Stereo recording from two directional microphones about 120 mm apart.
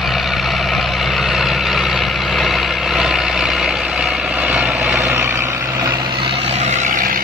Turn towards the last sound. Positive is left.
turn(degrees=-85)